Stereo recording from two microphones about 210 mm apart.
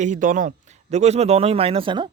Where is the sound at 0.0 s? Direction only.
35° right (ahead or behind).